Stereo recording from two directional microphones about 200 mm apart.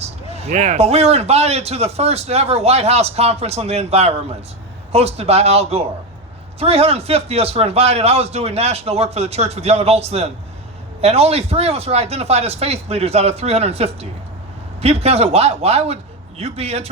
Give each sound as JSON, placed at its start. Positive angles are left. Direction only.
{"t": 0.0, "sound": "speech", "side_deg": -30}